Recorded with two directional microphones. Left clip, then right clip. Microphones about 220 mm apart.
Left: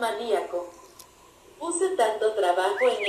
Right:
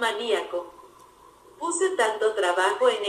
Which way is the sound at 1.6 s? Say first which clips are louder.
Even; 40° right (ahead or behind).